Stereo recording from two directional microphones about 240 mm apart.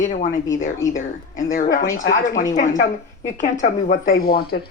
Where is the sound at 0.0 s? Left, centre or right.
Left.